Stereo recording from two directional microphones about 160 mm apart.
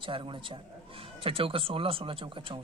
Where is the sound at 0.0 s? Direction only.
30° right (ahead or behind).